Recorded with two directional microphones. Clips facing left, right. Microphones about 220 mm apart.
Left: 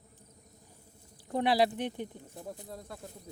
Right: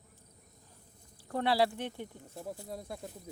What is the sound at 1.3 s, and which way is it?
Speech, 15° left (ahead or behind).